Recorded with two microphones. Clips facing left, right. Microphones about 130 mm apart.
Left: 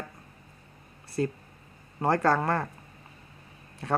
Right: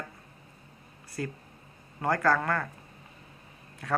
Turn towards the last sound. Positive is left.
turn(degrees=30)  # may be behind; listen again after turning